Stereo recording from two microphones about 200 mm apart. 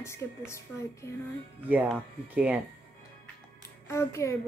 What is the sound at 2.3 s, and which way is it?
Speech, 5° right (ahead or behind).